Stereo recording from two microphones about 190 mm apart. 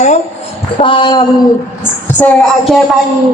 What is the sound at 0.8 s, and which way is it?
Speech, 25° left (ahead or behind).